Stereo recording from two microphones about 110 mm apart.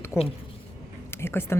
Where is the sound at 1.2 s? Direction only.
20° left (ahead or behind).